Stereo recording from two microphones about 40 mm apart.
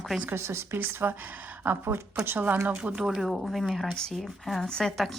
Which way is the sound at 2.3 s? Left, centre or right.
Right.